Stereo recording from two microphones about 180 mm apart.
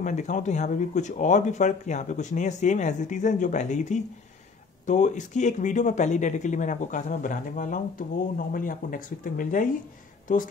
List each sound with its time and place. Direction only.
0.0 s speech: 40° left (ahead or behind)